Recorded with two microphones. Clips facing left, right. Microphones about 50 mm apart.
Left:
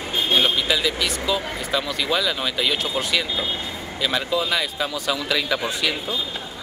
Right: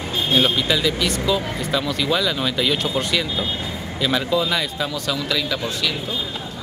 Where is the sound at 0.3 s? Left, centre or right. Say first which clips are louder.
Right 2 dB; centre.